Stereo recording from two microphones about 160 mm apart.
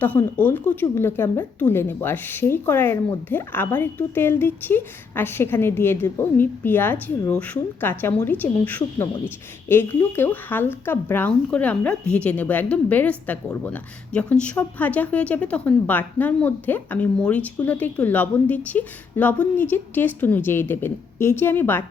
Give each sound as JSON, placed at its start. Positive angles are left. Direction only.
{"t": 0.0, "sound": "a woman's voice", "side_deg": 10}